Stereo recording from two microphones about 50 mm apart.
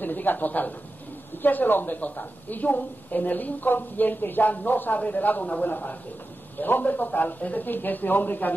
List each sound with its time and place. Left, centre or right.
0.0 s a woman's voice: left